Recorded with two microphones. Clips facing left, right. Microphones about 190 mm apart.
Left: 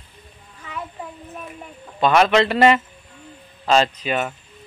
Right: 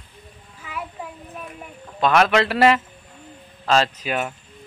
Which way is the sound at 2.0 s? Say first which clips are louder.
Left 2 dB; centre (ahead or behind).